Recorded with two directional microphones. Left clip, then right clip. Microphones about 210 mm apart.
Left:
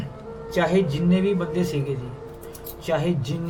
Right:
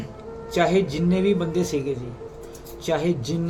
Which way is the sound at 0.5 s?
20° right (ahead or behind).